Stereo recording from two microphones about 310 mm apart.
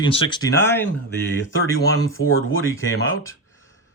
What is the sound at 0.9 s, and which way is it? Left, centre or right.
Speech, left.